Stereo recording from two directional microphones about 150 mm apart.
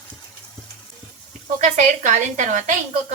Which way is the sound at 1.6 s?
55° right (ahead or behind).